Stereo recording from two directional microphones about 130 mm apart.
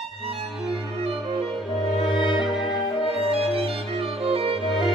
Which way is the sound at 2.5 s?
5° right (ahead or behind).